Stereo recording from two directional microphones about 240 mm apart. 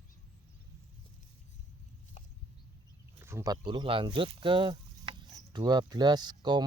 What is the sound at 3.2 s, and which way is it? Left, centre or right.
Speech, centre.